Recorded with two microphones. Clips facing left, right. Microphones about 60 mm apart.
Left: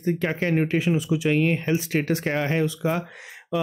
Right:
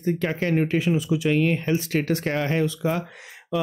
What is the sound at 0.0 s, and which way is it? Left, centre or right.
Speech, centre.